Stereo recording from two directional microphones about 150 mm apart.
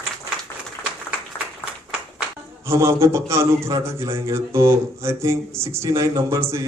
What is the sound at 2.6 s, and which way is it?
A man's voice, 20° right (ahead or behind).